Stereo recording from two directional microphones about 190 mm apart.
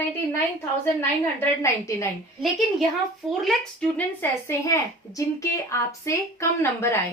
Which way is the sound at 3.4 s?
5° left (ahead or behind).